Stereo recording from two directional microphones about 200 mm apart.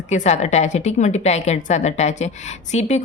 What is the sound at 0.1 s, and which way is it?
A woman's voice, 35° left (ahead or behind).